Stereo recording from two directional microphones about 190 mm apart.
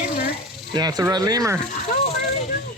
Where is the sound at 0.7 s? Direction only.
20° right (ahead or behind).